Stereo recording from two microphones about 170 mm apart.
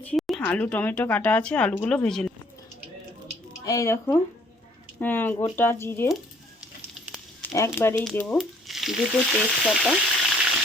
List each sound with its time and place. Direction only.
0.0 s speech: 5° left (ahead or behind)
3.7 s speech: 20° left (ahead or behind)
7.5 s speech: 15° left (ahead or behind)
8.4 s frying: centre (ahead or behind)